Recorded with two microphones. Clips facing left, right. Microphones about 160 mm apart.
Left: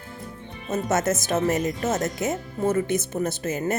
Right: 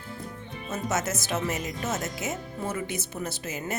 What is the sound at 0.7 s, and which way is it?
Speech, 55° left (ahead or behind).